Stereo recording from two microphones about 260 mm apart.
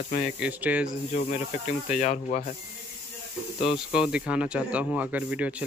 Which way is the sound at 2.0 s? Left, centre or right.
Left.